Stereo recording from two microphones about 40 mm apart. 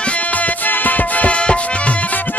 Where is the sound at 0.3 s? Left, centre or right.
Left.